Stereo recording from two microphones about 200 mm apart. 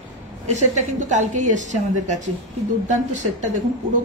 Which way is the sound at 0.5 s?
35° right (ahead or behind).